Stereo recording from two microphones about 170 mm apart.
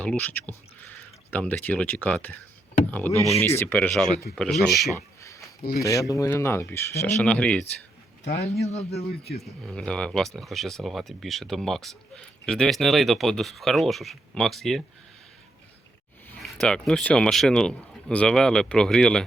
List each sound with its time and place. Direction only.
0.0 s speech: 10° left (ahead or behind)
5.8 s speech: 20° left (ahead or behind)
8.6 s speech: 40° left (ahead or behind)
8.9 s speech: 70° left (ahead or behind)
9.4 s speech: 5° left (ahead or behind)
16.4 s speech: 5° left (ahead or behind)